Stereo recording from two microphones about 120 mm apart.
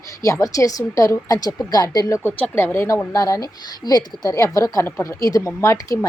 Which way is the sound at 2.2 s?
20° left (ahead or behind).